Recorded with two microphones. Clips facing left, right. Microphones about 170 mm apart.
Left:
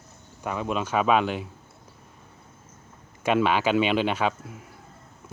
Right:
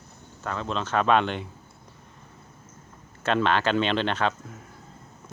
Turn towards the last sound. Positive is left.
turn(degrees=10)  # may be behind; listen again after turning